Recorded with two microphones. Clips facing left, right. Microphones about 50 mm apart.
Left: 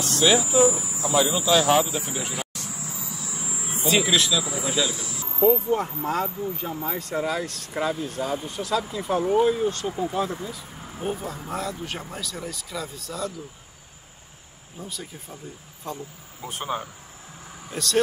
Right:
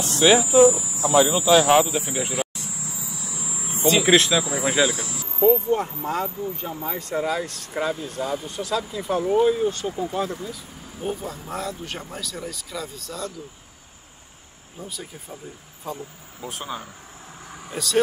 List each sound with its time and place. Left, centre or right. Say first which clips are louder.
0.0 s speech: right 3 dB; centre
4.0 s speech: right 5 dB; right
5.3 s speech: right 2 dB; centre
14.8 s speech: right 1 dB; centre
17.6 s speech: even; centre